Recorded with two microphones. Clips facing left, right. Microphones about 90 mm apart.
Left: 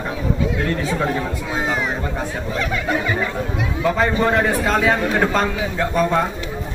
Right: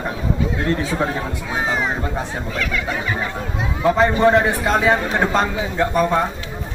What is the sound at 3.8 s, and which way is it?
A man's voice, 20° right (ahead or behind).